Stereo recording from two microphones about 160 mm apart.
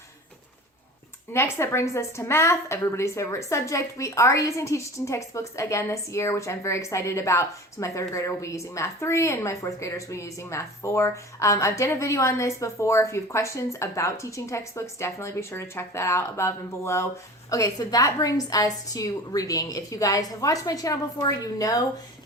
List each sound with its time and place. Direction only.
1.3 s a woman's voice: 15° left (ahead or behind)